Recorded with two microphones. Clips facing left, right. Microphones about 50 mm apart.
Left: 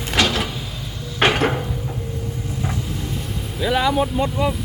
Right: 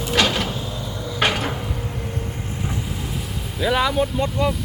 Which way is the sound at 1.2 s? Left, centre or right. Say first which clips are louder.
Left 3 dB; left.